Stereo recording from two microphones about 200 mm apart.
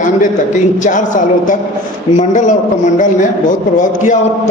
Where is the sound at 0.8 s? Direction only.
40° left (ahead or behind).